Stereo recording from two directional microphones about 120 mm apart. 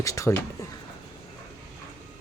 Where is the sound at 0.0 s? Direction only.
30° left (ahead or behind).